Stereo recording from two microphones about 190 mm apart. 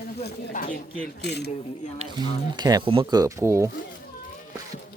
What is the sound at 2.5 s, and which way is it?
Speech, 20° right (ahead or behind).